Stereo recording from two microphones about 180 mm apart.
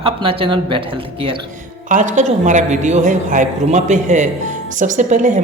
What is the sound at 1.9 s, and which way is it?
Speech, 45° right (ahead or behind).